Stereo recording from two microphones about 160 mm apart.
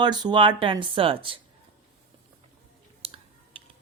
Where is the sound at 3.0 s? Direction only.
40° right (ahead or behind).